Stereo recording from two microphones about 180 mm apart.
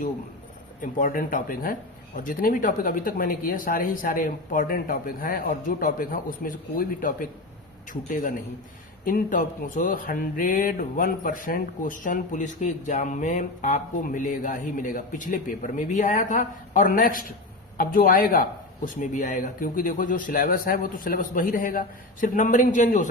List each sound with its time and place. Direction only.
0.8 s speech: 45° left (ahead or behind)
9.0 s speech: 50° left (ahead or behind)